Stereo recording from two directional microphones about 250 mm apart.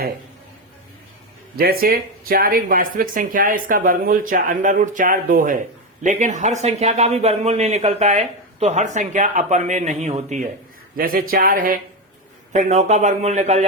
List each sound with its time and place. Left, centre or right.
1.5 s speech: right